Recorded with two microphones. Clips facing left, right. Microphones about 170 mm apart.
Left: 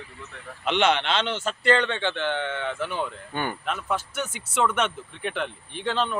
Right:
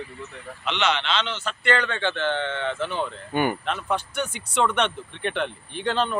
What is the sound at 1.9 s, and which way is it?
Speech, 15° left (ahead or behind).